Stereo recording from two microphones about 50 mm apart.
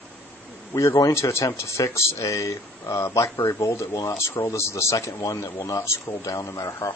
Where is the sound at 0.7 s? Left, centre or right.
Left.